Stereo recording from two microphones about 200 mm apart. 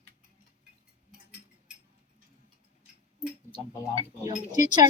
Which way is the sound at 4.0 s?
25° right (ahead or behind).